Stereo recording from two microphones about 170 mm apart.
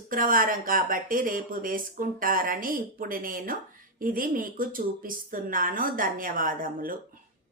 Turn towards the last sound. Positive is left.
turn(degrees=-55)  # may be behind; listen again after turning